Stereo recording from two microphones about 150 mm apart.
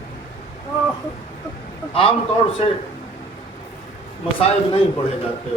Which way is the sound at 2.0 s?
40° left (ahead or behind).